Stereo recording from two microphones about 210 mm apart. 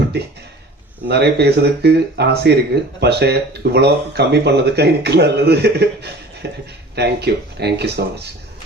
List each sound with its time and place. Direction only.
1.0 s speech: 50° right (ahead or behind)